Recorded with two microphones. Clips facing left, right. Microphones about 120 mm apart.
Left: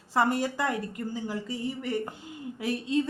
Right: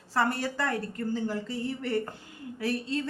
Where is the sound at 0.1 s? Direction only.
15° left (ahead or behind).